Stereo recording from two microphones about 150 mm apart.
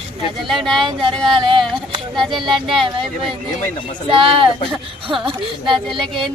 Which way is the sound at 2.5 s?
Centre (ahead or behind).